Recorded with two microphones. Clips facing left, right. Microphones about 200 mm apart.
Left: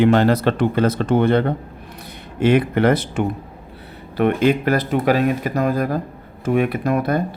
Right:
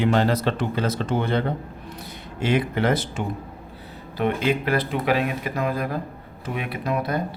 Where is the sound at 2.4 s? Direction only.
55° left (ahead or behind).